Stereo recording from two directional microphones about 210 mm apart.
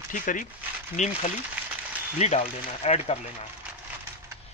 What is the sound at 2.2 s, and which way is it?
Speech, 30° left (ahead or behind).